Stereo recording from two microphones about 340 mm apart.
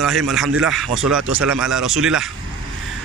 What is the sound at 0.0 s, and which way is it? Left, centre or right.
A man's voice, centre.